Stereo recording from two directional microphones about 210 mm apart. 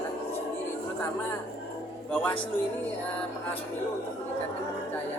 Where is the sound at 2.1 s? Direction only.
5° left (ahead or behind).